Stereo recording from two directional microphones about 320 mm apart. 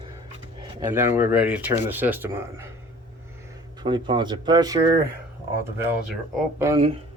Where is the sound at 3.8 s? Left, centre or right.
Centre.